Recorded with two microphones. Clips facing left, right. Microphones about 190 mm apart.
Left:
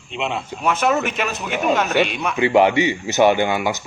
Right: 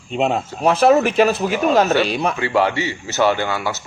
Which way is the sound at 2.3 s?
20° left (ahead or behind).